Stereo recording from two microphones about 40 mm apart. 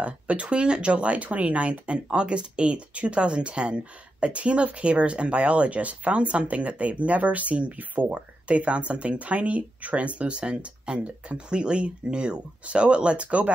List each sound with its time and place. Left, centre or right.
0.0 s speech: right